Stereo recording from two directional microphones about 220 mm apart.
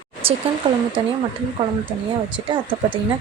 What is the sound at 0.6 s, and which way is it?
Speech, 20° right (ahead or behind).